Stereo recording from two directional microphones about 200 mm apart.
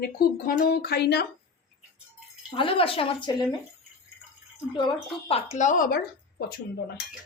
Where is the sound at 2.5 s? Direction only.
25° left (ahead or behind).